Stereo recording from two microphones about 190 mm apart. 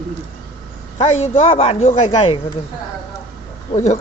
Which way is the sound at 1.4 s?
30° left (ahead or behind).